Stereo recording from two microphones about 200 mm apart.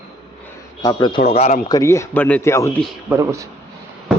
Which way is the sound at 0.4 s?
20° left (ahead or behind).